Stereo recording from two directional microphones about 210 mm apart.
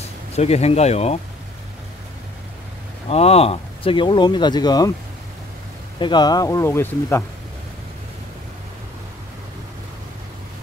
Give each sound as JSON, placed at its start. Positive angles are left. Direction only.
{"t": 0.4, "sound": "speech", "side_deg": 30}
{"t": 3.1, "sound": "speech", "side_deg": 30}
{"t": 5.9, "sound": "speech", "side_deg": 20}